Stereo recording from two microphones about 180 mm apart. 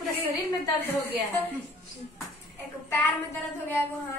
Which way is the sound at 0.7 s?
10° left (ahead or behind).